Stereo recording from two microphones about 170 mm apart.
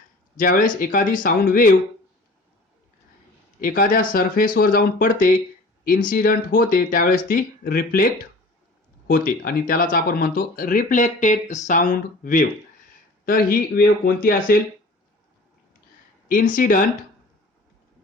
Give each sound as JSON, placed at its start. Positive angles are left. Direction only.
{"t": 0.3, "sound": "speech", "side_deg": 55}
{"t": 3.6, "sound": "speech", "side_deg": 55}
{"t": 16.3, "sound": "speech", "side_deg": 55}